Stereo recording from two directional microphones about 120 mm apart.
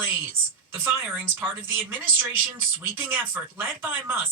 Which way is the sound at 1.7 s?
15° right (ahead or behind).